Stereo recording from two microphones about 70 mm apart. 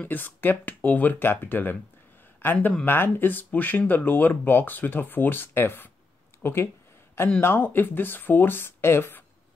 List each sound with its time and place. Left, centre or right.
0.0 s speech: left